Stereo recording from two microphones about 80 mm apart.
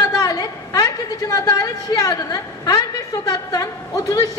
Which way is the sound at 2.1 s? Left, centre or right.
Left.